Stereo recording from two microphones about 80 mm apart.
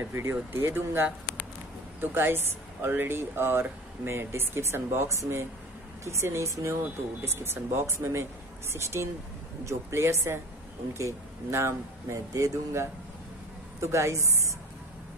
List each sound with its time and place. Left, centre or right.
0.1 s a woman's voice: right